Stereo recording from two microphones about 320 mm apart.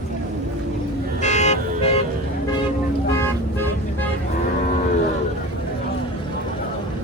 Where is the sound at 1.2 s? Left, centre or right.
Left.